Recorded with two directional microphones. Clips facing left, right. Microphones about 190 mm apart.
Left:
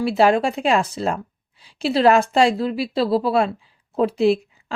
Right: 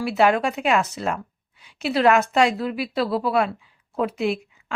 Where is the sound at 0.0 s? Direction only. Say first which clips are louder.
Left 3 dB; 30° left (ahead or behind).